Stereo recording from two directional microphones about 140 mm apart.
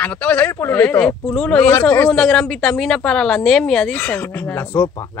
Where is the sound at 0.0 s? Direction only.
10° left (ahead or behind).